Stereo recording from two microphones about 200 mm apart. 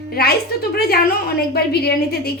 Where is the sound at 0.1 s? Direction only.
50° left (ahead or behind).